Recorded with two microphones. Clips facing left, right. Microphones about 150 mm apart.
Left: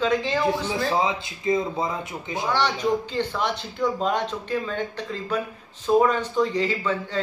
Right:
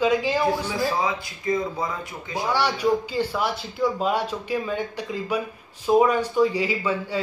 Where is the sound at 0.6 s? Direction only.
20° left (ahead or behind).